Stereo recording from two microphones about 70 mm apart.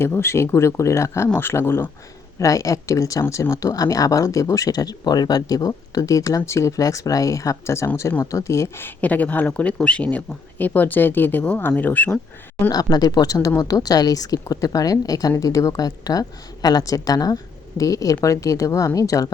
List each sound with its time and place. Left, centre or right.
0.0 s speech: left
2.4 s speech: left
8.8 s speech: left
12.7 s a woman's voice: left